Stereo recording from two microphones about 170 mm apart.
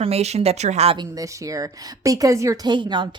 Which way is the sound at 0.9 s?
25° right (ahead or behind).